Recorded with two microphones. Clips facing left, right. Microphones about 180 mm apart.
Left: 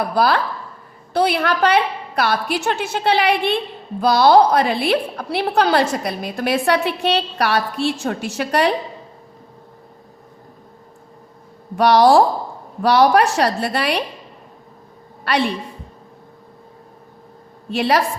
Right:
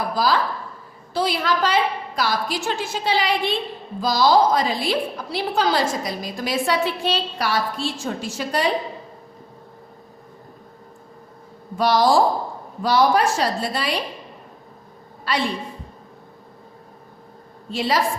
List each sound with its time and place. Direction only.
0.1 s a woman's voice: 60° left (ahead or behind)
11.8 s a woman's voice: 65° left (ahead or behind)
15.3 s a woman's voice: 65° left (ahead or behind)
17.7 s a woman's voice: 65° left (ahead or behind)